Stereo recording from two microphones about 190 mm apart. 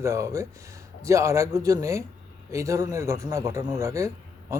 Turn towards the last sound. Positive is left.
turn(degrees=-15)  # may be behind; listen again after turning